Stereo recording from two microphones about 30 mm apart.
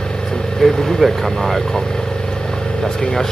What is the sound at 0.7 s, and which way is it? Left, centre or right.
Speech, centre.